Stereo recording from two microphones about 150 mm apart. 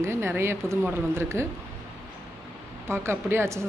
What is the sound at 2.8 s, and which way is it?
Speech, 15° right (ahead or behind).